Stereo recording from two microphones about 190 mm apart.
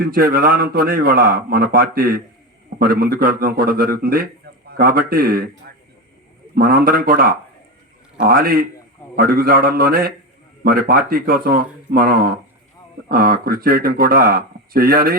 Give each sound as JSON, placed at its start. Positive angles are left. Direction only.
{"t": 0.0, "sound": "a man's voice", "side_deg": -50}